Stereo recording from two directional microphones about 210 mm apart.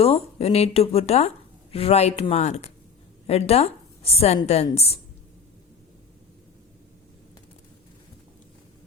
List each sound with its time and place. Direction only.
0.0 s a woman's voice: 30° left (ahead or behind)